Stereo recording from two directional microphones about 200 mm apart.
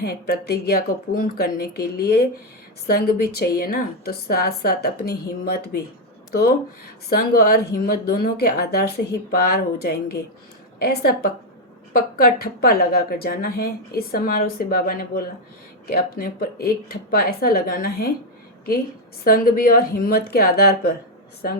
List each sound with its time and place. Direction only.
0.0 s a woman's voice: 50° left (ahead or behind)
7.1 s a woman's voice: 50° left (ahead or behind)
19.2 s a woman's voice: 50° left (ahead or behind)